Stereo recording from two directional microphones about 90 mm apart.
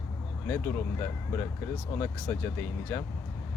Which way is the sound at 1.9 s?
25° left (ahead or behind).